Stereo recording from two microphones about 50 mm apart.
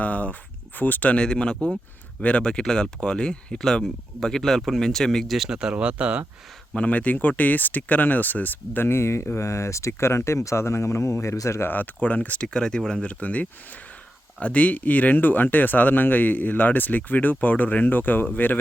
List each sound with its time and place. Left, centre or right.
0.0 s speech: left
1.1 s speech: centre
5.3 s speech: centre
5.7 s speech: right
6.7 s speech: left
8.9 s speech: left
11.7 s speech: left
12.4 s speech: centre; by 18.6 s left